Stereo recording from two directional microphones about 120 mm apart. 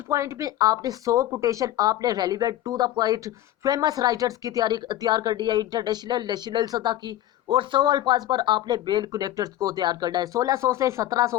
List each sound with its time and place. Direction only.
0.1 s speech: 25° right (ahead or behind)